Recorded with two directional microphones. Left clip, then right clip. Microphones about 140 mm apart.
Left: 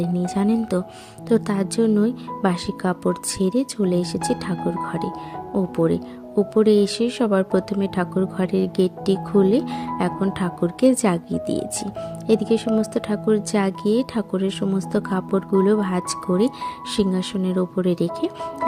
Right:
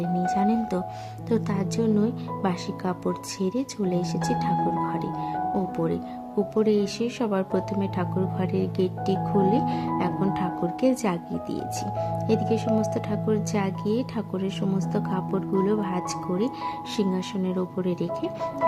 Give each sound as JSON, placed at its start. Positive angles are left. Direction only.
{"t": 0.3, "sound": "speech", "side_deg": 30}